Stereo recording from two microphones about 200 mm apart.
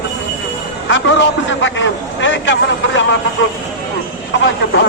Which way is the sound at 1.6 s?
65° left (ahead or behind).